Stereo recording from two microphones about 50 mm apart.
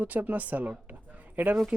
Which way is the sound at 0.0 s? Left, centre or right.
Right.